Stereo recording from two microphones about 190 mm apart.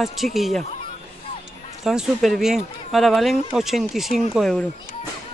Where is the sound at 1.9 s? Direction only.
Centre (ahead or behind).